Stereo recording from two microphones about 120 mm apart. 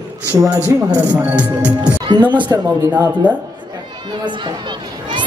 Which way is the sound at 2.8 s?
25° right (ahead or behind).